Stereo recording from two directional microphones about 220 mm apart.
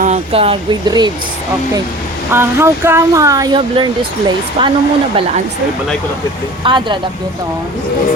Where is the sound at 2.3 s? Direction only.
10° right (ahead or behind).